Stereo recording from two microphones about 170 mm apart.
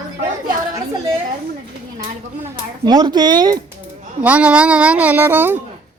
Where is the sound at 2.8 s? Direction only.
25° right (ahead or behind).